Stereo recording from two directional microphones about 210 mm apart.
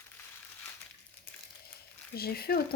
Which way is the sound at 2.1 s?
45° left (ahead or behind).